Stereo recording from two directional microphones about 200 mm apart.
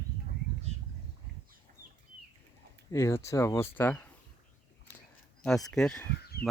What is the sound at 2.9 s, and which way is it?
Speech, 15° left (ahead or behind).